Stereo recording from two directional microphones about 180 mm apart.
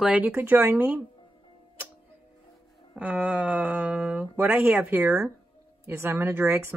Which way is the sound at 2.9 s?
10° right (ahead or behind).